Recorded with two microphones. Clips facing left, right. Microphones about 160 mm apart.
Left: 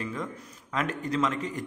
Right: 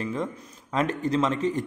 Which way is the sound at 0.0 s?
30° right (ahead or behind).